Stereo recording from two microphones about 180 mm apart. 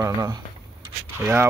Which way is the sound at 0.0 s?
20° right (ahead or behind).